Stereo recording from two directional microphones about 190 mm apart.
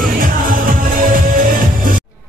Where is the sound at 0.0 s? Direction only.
45° right (ahead or behind).